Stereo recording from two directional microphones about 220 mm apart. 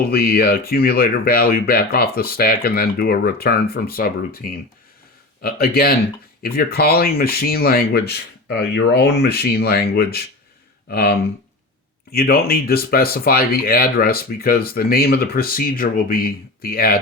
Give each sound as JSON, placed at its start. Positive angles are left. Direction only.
{"t": 0.0, "sound": "speech", "side_deg": 45}